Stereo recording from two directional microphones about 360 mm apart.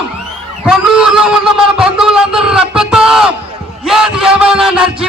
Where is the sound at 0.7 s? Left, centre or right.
Centre.